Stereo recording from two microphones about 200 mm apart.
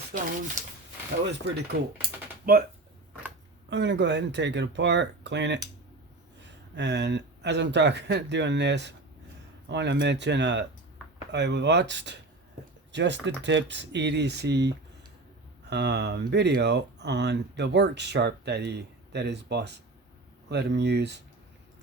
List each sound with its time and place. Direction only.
0.1 s speech: 40° right (ahead or behind)
2.5 s speech: 45° right (ahead or behind)
3.7 s speech: 60° right (ahead or behind)
6.7 s speech: 60° right (ahead or behind)